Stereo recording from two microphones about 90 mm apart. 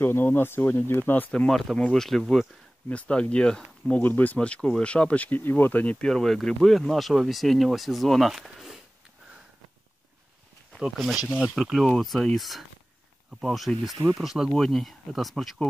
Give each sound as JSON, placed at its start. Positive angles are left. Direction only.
{"t": 0.0, "sound": "speech", "side_deg": 25}
{"t": 1.5, "sound": "speech", "side_deg": 0}
{"t": 2.9, "sound": "speech", "side_deg": 15}
{"t": 4.0, "sound": "speech", "side_deg": 20}
{"t": 10.8, "sound": "speech", "side_deg": 0}